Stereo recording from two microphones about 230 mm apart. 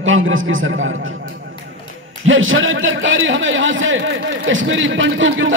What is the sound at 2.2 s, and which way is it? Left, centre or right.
A man's voice, right.